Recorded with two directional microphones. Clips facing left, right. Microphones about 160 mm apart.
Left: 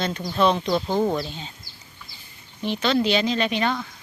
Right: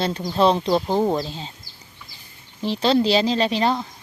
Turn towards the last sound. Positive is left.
turn(degrees=-30)  # may be behind; listen again after turning